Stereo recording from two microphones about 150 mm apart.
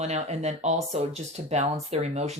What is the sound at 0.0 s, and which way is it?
Speech, 45° right (ahead or behind).